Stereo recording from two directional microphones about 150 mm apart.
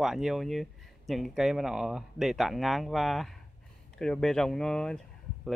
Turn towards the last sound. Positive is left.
turn(degrees=5)  # may be behind; listen again after turning